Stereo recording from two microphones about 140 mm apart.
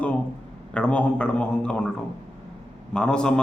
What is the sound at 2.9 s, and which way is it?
Speech, 5° left (ahead or behind).